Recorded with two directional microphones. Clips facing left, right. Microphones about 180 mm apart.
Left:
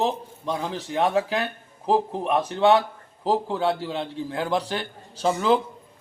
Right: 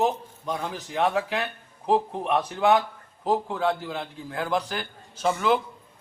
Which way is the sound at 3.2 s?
30° left (ahead or behind).